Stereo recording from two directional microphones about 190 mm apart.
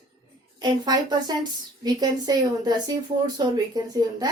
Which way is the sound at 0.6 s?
20° right (ahead or behind).